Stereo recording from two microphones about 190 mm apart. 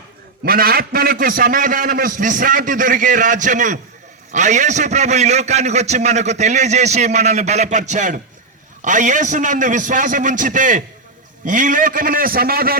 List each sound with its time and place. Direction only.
0.4 s a man's voice: 50° right (ahead or behind)